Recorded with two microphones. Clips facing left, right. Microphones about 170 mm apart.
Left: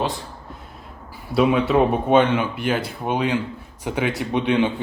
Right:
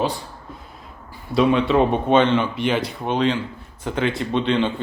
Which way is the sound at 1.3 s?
5° left (ahead or behind).